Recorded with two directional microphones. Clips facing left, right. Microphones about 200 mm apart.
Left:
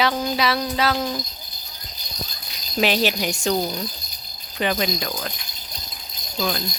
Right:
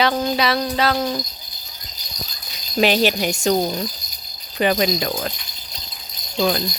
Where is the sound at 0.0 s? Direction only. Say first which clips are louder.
Right 2 dB; 5° left (ahead or behind).